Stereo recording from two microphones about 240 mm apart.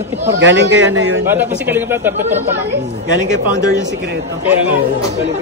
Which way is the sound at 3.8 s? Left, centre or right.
Right.